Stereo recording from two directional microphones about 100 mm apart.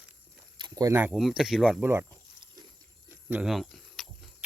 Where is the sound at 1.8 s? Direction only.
20° right (ahead or behind).